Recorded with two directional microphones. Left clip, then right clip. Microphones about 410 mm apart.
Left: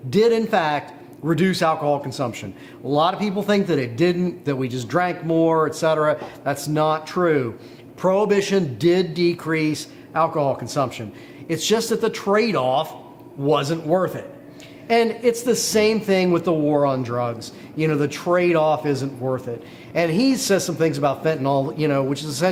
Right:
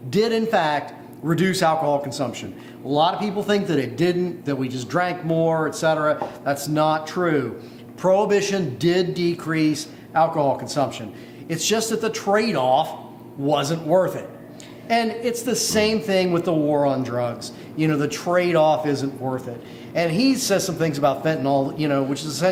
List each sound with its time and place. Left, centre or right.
0.1 s a man's voice: left